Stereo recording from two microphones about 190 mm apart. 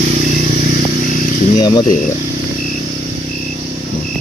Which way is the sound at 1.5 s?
20° left (ahead or behind).